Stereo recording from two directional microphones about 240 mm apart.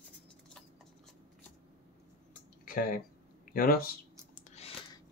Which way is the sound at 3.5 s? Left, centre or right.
Left.